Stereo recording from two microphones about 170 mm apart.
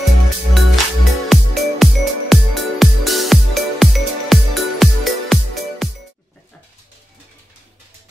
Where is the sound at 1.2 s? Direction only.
Centre (ahead or behind).